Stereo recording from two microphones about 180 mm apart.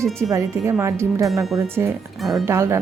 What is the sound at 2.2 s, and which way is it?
Speech, centre (ahead or behind).